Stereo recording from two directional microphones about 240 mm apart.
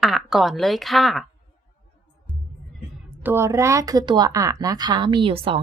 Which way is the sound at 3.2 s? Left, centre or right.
Centre.